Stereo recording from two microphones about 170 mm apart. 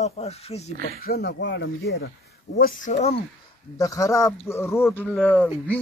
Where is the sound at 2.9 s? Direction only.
40° left (ahead or behind).